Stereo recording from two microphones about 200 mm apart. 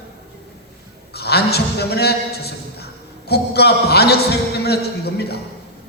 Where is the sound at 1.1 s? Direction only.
55° left (ahead or behind).